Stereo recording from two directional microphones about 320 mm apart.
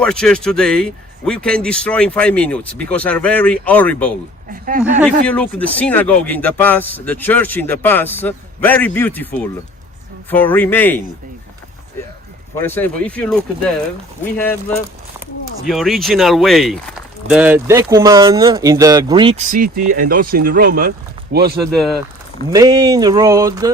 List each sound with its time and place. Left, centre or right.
0.0 s speech: centre
12.5 s speech: centre; by 20.7 s right
21.2 s a sound: centre
22.5 s speech: centre